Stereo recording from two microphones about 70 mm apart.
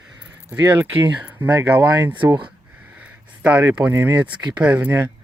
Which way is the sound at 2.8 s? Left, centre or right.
Right.